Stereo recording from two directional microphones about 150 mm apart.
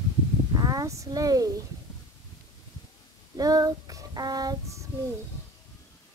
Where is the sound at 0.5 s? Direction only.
25° right (ahead or behind).